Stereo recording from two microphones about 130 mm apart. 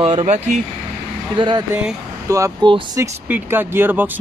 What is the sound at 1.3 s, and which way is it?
Speech, 35° right (ahead or behind).